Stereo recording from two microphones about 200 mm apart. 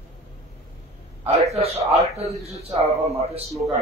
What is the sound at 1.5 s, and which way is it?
Speech, 30° right (ahead or behind).